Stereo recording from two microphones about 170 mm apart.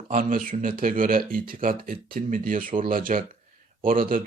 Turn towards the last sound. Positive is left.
turn(degrees=-55)  # may be behind; listen again after turning